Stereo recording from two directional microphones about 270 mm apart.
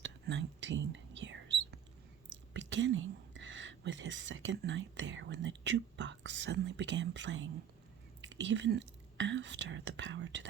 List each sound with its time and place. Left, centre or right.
0.0 s whispering: right
2.5 s a woman's voice: right